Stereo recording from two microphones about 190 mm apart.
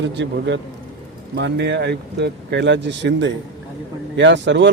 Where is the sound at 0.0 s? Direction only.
65° right (ahead or behind).